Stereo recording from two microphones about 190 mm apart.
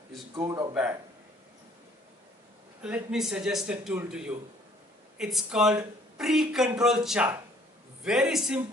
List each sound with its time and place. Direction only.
0.4 s speech: 15° right (ahead or behind)
2.8 s speech: 5° right (ahead or behind)